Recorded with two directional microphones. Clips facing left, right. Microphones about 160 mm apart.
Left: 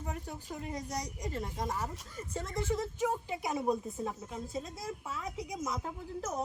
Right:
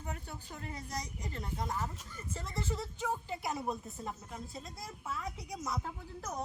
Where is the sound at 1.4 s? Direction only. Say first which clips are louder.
Left 1 dB; 20° left (ahead or behind).